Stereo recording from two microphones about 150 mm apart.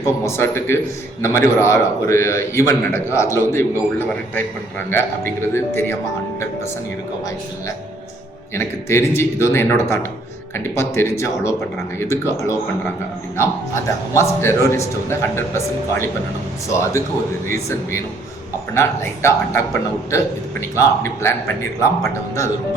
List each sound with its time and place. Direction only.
0.3 s a man's voice: 15° left (ahead or behind)
8.5 s a man's voice: 15° left (ahead or behind)
17.5 s a man's voice: 20° left (ahead or behind)